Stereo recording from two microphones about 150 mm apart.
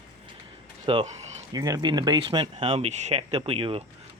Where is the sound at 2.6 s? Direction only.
45° right (ahead or behind).